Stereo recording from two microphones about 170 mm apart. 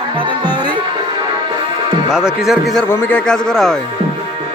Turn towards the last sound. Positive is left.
turn(degrees=5)  # may be behind; listen again after turning